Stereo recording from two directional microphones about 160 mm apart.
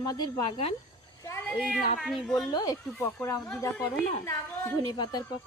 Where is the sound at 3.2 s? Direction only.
20° left (ahead or behind).